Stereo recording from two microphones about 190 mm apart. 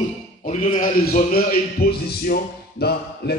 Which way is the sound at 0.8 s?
50° left (ahead or behind).